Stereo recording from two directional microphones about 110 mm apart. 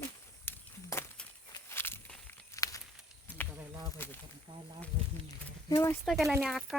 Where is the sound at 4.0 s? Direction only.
20° left (ahead or behind).